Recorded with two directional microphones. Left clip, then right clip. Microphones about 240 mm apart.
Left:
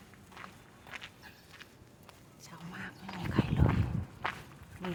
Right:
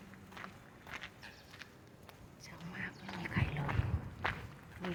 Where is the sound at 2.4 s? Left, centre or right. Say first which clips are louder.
Even; centre.